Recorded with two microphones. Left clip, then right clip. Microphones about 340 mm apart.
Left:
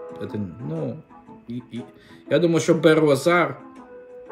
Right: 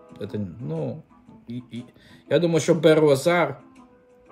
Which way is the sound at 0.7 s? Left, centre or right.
Centre.